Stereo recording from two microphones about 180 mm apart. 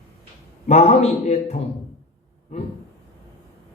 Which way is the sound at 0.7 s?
35° left (ahead or behind).